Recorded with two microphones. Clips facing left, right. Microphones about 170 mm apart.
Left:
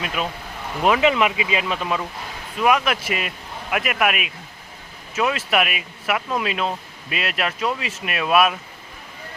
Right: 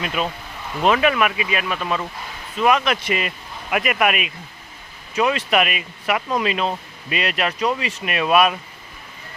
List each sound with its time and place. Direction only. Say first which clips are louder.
0.0 s speech: right 2 dB; centre (ahead or behind)
0.9 s speech: even; 15° left (ahead or behind)